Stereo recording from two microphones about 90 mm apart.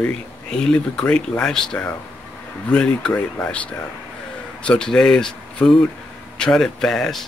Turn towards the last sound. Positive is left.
turn(degrees=5)  # may be behind; listen again after turning